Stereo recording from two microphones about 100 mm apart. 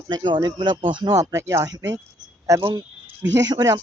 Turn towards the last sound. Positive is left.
turn(degrees=-40)  # may be behind; listen again after turning